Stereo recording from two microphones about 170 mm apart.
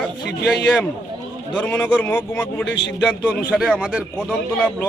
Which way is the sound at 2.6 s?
90° left.